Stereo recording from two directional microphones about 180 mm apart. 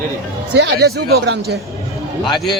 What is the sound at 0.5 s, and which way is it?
Speech, 65° right (ahead or behind).